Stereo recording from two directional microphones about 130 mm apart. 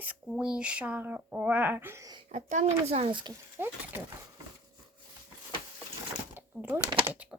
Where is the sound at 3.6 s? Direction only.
15° right (ahead or behind).